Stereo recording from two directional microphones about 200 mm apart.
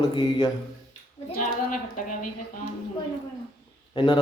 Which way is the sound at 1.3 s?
40° left (ahead or behind).